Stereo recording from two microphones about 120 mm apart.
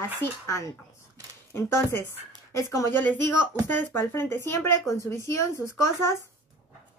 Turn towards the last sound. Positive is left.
turn(degrees=25)  # may be behind; listen again after turning